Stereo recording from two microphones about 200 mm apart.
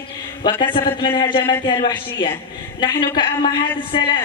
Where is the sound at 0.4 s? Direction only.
20° left (ahead or behind).